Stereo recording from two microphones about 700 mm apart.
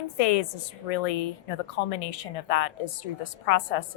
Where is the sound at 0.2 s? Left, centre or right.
Left.